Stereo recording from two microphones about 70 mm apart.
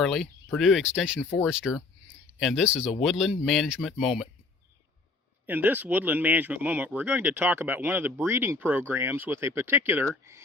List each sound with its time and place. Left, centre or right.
0.0 s speech: centre
0.6 s speech: centre
1.7 s speech: centre
2.6 s speech: centre
5.5 s speech: right